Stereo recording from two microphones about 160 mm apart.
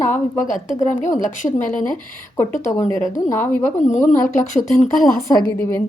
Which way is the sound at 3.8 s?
50° left (ahead or behind).